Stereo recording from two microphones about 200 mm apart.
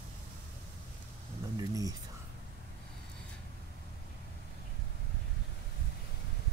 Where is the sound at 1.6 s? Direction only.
15° right (ahead or behind).